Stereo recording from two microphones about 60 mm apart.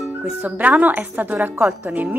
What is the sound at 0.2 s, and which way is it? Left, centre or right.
Speech, right.